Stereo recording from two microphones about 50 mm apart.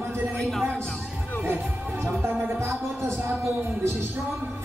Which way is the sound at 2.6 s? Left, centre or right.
Right.